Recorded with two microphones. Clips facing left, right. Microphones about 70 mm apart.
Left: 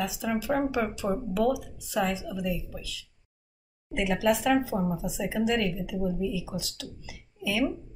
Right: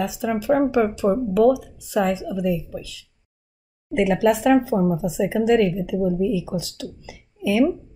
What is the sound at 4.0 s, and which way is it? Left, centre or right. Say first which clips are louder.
Speech: right 7 dB; right.